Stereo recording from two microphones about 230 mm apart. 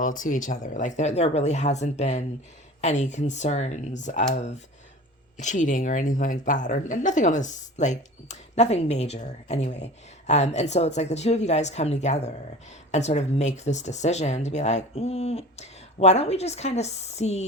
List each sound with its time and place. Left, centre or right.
0.0 s speech: left